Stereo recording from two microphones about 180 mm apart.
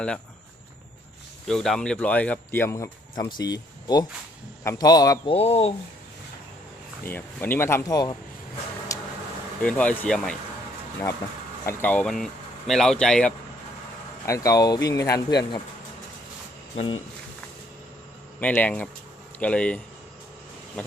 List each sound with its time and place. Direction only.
1.5 s speech: centre (ahead or behind); by 5.3 s 20° left (ahead or behind)
5.3 s speech: 35° left (ahead or behind)
7.0 s speech: 10° left (ahead or behind)
8.9 s a sound: 20° left (ahead or behind)
9.6 s speech: 10° left (ahead or behind)
11.6 s speech: 10° left (ahead or behind)
14.3 s speech: 20° left (ahead or behind)
16.7 s speech: 30° left (ahead or behind)
18.3 s speech: 10° left (ahead or behind)